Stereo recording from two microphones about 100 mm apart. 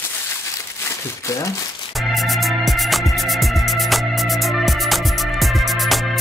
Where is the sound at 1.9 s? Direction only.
Centre (ahead or behind).